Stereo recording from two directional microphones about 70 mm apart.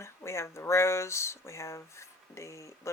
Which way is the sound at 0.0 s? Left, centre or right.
Left.